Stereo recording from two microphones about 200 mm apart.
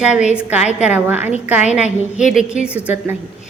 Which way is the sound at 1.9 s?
35° left (ahead or behind).